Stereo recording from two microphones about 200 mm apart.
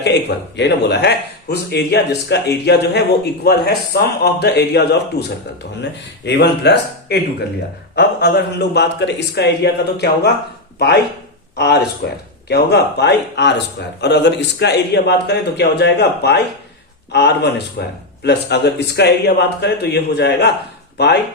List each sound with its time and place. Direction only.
0.0 s a man's voice: 60° left (ahead or behind)